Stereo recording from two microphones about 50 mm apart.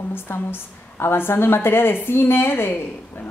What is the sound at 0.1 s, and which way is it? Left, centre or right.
A woman's voice, left.